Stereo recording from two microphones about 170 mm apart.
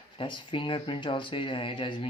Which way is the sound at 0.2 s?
30° left (ahead or behind).